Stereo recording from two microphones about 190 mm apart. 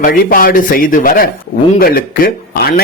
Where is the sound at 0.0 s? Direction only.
50° left (ahead or behind).